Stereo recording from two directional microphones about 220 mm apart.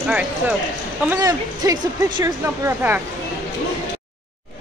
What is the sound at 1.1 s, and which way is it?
Speech, 15° right (ahead or behind).